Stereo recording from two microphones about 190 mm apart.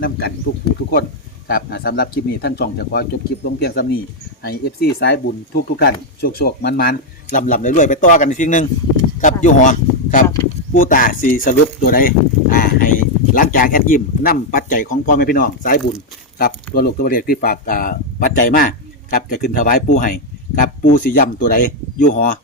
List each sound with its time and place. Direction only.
0.0 s speech: 55° left (ahead or behind)
19.1 s speech: 50° left (ahead or behind)